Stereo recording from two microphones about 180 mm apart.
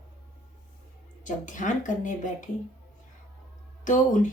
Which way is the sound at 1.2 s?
45° left (ahead or behind).